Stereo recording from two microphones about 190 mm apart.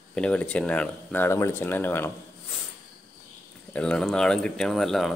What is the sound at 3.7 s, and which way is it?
Speech, 5° left (ahead or behind).